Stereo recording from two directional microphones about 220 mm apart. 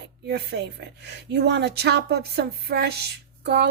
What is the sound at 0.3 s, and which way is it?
A woman's voice, 50° right (ahead or behind).